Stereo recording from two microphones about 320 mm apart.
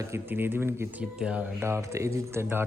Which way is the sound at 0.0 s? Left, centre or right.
Centre.